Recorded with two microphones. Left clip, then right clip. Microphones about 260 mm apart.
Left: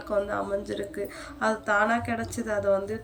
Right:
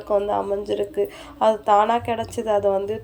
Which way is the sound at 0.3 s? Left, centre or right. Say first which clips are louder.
Right 7 dB; centre.